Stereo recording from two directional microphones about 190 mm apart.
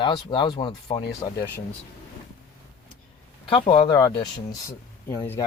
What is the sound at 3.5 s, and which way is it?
Speech, 25° left (ahead or behind).